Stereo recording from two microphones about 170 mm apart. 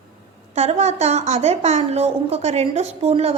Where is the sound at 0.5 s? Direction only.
40° right (ahead or behind).